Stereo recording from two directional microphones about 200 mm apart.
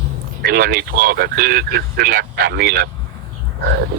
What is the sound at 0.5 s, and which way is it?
Speech, 50° right (ahead or behind).